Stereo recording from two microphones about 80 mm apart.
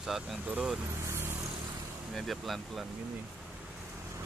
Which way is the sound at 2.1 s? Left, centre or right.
Centre.